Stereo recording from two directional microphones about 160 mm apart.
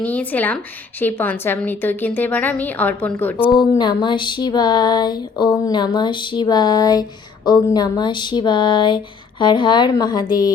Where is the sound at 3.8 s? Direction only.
30° left (ahead or behind).